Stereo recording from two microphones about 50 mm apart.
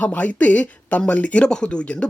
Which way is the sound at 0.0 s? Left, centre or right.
Left.